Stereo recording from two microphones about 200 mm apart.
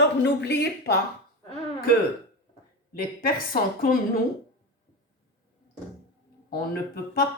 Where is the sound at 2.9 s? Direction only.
45° left (ahead or behind).